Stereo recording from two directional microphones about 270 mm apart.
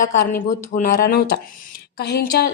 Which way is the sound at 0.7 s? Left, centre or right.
Left.